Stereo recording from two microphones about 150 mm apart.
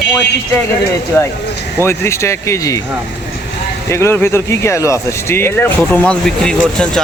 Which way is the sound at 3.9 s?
15° left (ahead or behind).